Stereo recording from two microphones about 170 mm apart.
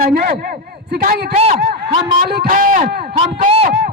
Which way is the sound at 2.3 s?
60° right (ahead or behind).